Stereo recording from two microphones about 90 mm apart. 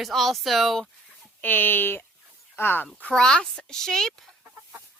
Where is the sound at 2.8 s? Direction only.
10° left (ahead or behind).